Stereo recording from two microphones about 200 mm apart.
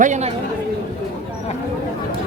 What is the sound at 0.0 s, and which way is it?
Speech, 35° right (ahead or behind).